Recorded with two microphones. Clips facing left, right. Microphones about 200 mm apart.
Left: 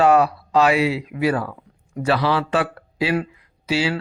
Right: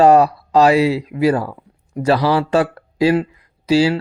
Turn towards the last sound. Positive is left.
turn(degrees=-40)  # may be behind; listen again after turning